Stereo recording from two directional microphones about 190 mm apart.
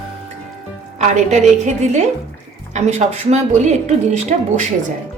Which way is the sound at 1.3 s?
40° right (ahead or behind).